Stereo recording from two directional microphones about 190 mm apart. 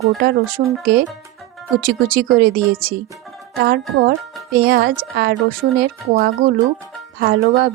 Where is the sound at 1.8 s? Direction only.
50° right (ahead or behind).